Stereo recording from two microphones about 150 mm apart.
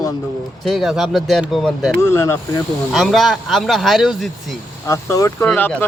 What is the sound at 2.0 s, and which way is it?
Speech, 20° left (ahead or behind).